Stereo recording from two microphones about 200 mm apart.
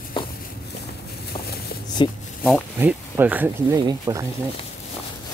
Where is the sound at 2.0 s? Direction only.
25° left (ahead or behind).